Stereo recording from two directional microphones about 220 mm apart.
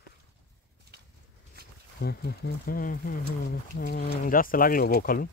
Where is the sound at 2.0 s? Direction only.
45° left (ahead or behind).